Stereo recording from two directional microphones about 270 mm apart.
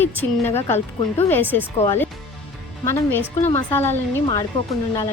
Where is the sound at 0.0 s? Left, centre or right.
Centre.